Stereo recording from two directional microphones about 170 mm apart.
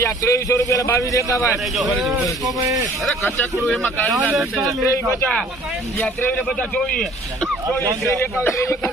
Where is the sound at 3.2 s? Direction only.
15° left (ahead or behind).